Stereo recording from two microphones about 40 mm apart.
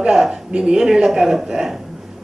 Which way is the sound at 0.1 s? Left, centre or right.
Centre.